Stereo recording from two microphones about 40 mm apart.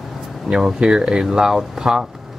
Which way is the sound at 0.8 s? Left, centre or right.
Right.